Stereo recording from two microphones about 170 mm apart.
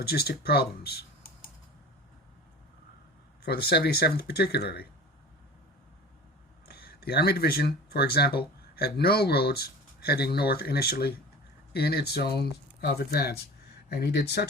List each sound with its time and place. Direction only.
0.0 s speech: 65° left (ahead or behind)
3.4 s speech: 70° left (ahead or behind)
6.7 s speech: 70° left (ahead or behind)